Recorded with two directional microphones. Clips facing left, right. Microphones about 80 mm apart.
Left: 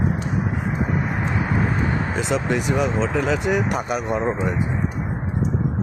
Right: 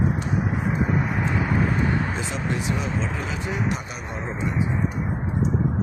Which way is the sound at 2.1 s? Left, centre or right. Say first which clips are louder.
Left 6 dB; left.